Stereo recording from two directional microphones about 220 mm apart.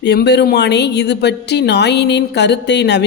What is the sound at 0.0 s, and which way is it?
A man's voice, 50° left (ahead or behind).